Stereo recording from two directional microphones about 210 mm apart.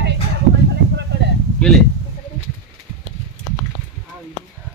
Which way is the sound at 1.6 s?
5° left (ahead or behind).